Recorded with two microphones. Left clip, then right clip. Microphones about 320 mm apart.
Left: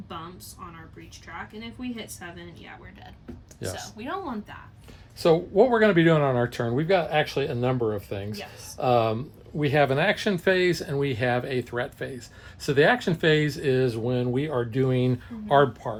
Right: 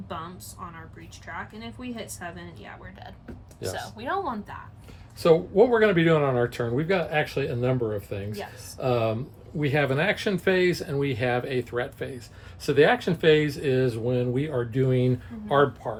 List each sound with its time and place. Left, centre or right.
3.9 s speech: centre
5.2 s speech: left